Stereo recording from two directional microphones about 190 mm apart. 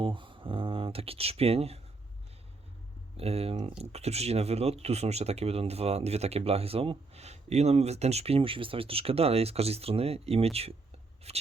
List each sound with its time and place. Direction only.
0.0 s speech: 25° right (ahead or behind)
3.2 s speech: 30° right (ahead or behind)